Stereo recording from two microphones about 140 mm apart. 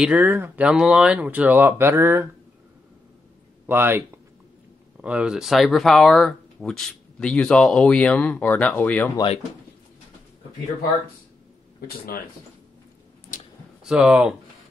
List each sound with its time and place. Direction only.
0.0 s speech: 10° right (ahead or behind)
3.6 s speech: 15° right (ahead or behind)
5.0 s speech: 10° right (ahead or behind); by 9.1 s 10° left (ahead or behind)
13.3 s a sound: 75° left (ahead or behind)
13.8 s speech: 5° right (ahead or behind)